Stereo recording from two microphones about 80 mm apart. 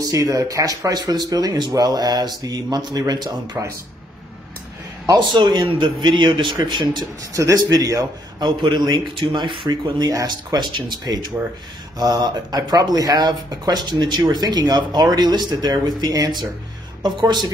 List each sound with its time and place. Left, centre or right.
0.0 s speech: right
5.0 s speech: right
7.3 s speech: right